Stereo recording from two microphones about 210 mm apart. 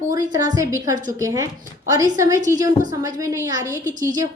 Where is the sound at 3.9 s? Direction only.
40° right (ahead or behind).